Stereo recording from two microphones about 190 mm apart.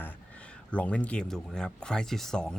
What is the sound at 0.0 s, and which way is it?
Speech, 10° left (ahead or behind).